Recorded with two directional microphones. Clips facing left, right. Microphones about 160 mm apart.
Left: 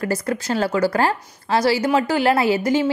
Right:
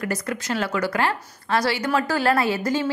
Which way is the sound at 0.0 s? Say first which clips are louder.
Left 4 dB; 30° left (ahead or behind).